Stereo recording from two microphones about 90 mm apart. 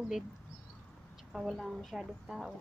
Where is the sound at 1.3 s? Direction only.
Centre (ahead or behind).